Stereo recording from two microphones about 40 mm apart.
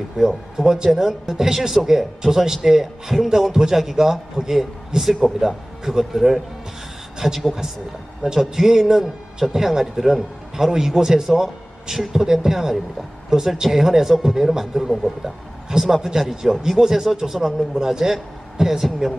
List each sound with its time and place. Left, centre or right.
0.2 s a man's voice: centre